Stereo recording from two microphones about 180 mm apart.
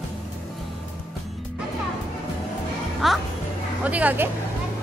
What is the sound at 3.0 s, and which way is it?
Music, centre (ahead or behind).